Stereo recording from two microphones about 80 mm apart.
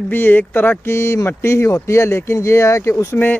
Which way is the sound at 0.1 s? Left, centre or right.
Left.